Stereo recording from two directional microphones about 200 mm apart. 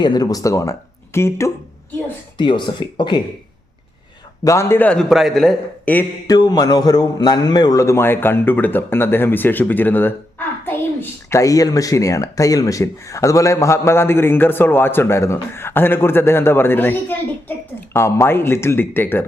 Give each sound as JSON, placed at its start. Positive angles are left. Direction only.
{"t": 0.0, "sound": "speech", "side_deg": 20}
{"t": 4.4, "sound": "speech", "side_deg": 15}
{"t": 6.3, "sound": "speech", "side_deg": 20}